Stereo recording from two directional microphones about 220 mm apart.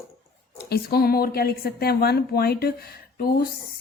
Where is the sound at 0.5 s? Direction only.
45° left (ahead or behind).